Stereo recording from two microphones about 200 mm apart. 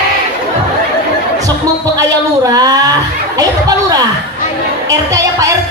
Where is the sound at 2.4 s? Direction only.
20° right (ahead or behind).